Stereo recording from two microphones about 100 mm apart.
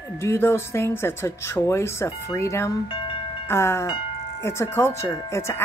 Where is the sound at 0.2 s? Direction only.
25° left (ahead or behind).